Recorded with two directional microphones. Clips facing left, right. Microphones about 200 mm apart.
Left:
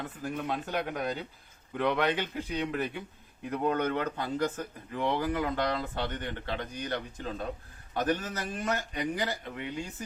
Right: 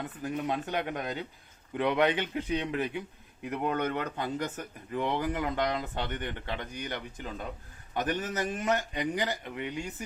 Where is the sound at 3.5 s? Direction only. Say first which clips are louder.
Left 2 dB; 15° right (ahead or behind).